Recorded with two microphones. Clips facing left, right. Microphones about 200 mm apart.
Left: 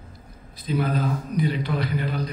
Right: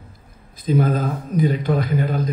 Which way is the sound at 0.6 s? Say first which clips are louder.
Right 5 dB; 45° right (ahead or behind).